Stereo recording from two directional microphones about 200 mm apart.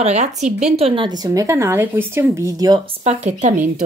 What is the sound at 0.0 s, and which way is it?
A woman's voice, 35° right (ahead or behind).